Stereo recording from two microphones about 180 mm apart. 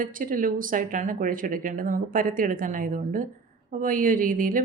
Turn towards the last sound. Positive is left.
turn(degrees=-50)  # may be behind; listen again after turning